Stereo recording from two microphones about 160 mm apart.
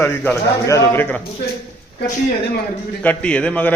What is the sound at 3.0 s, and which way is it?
Speech, 5° left (ahead or behind).